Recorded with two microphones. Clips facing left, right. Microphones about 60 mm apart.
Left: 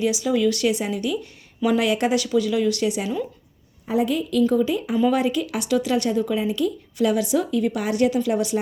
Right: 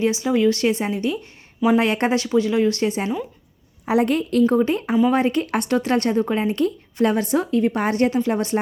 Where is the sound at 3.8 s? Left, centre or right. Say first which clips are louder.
Right 3 dB; right.